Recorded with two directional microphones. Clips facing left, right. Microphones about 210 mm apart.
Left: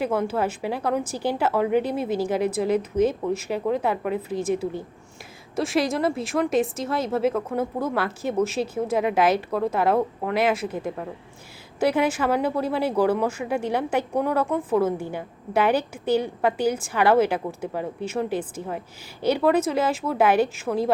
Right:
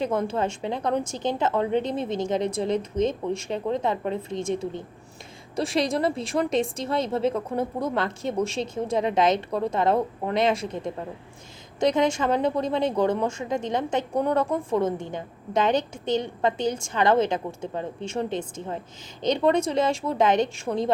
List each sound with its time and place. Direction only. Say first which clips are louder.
0.0 s a woman's voice: left 1 dB; 5° left (ahead or behind)